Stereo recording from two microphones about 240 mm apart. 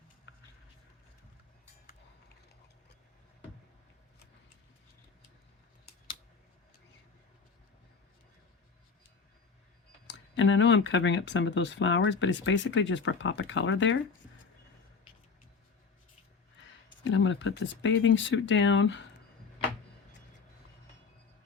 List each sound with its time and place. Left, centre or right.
10.1 s speech: left
17.0 s speech: left